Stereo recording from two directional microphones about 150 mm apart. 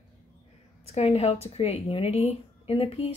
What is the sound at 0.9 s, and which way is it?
A woman's voice, 45° left (ahead or behind).